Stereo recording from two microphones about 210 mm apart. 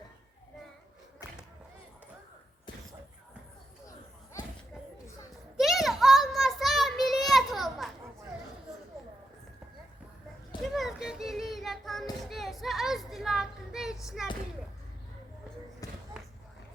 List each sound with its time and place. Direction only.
5.5 s child singing: centre (ahead or behind)
10.8 s child singing: centre (ahead or behind)
15.8 s basketball bounce: 15° left (ahead or behind)